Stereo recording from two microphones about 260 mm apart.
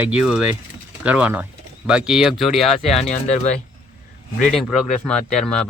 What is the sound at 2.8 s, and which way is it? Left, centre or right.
Speech, left.